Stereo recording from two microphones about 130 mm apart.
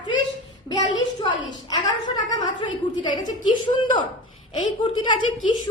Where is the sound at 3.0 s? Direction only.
35° left (ahead or behind).